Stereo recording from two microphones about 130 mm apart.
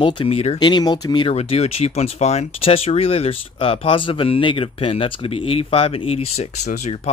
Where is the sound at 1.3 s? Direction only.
55° left (ahead or behind).